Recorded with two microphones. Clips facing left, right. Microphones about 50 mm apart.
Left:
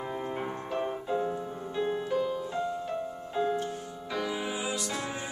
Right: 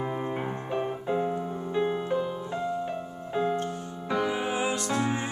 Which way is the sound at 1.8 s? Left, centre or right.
Right.